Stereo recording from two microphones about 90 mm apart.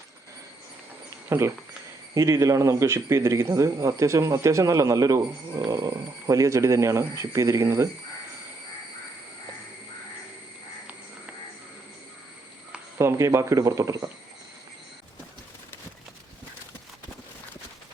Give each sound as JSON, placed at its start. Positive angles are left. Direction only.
{"t": 1.3, "sound": "speech", "side_deg": -30}
{"t": 13.0, "sound": "speech", "side_deg": -30}